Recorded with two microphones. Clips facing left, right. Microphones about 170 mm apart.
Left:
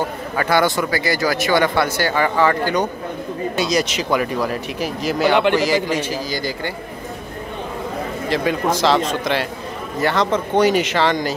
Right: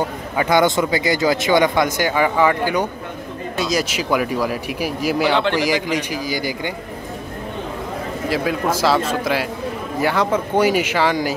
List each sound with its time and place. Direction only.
0.4 s speech: 20° right (ahead or behind)
5.3 s a man's voice: 15° left (ahead or behind)
5.6 s speech: 15° right (ahead or behind)
8.3 s speech: 5° right (ahead or behind)